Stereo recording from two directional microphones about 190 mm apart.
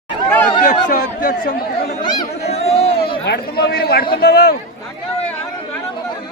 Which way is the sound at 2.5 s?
35° left (ahead or behind).